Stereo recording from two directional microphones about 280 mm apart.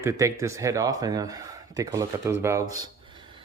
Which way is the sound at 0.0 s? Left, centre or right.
Centre.